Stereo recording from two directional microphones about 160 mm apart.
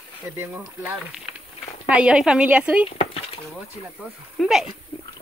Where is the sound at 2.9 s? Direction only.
40° left (ahead or behind).